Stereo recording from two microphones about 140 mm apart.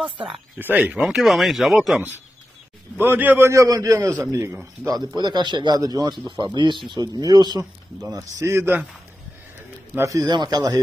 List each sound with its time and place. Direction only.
0.6 s speech: 15° right (ahead or behind)
3.0 s a man's voice: 15° right (ahead or behind)
9.9 s a man's voice: 25° right (ahead or behind)